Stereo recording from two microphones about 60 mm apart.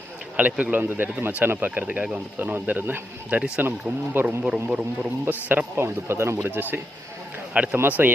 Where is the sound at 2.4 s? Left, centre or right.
Right.